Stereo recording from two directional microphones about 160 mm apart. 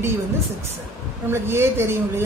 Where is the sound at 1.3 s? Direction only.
15° right (ahead or behind).